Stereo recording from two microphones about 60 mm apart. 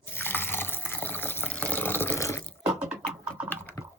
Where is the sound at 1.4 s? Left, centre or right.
Left.